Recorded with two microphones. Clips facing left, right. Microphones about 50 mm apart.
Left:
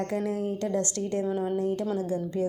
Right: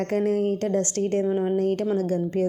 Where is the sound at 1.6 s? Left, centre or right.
Right.